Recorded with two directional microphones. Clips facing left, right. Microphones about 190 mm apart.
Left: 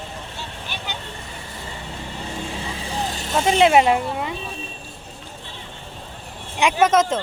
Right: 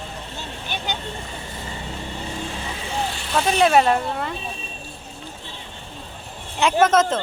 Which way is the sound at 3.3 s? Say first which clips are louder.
Left 2 dB; 20° left (ahead or behind).